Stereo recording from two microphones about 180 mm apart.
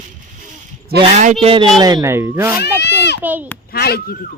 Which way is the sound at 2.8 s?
70° left (ahead or behind).